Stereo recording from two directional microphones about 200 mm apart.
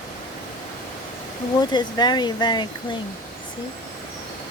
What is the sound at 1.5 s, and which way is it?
Speech, 20° left (ahead or behind).